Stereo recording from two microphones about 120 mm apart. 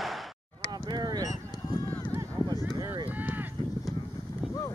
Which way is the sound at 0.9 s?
35° right (ahead or behind).